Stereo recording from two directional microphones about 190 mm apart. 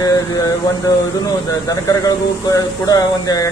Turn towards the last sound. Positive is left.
turn(degrees=20)  # may be behind; listen again after turning